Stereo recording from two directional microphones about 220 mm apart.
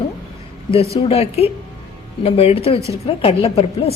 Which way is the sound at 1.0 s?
30° left (ahead or behind).